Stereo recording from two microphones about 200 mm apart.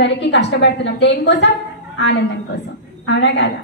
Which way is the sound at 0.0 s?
60° left (ahead or behind).